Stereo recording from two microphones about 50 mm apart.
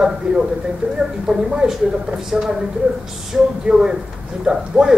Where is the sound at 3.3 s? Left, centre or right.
Centre.